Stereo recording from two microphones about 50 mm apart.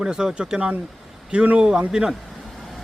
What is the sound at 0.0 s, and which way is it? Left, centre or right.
Speech, centre.